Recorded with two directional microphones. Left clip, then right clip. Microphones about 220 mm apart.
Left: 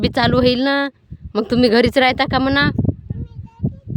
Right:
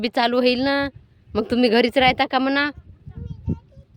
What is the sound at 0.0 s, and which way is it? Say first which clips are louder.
A woman's voice: left 3 dB; 15° left (ahead or behind).